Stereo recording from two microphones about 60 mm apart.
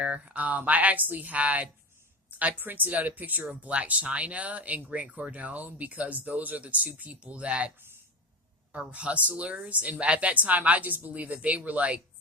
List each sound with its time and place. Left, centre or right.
0.0 s speech: right
8.9 s speech: right